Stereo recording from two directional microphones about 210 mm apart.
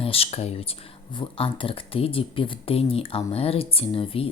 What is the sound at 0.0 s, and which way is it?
Speech, 25° left (ahead or behind).